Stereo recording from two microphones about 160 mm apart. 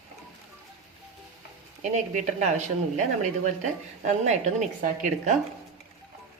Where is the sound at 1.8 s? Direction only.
50° right (ahead or behind).